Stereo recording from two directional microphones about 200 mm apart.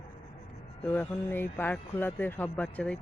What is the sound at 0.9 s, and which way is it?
Speech, 10° left (ahead or behind).